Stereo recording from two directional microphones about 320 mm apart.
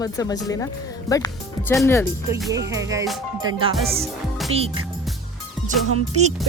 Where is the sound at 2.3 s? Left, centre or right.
Centre.